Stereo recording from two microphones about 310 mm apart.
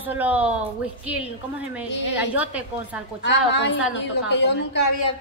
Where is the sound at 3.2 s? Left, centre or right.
Left.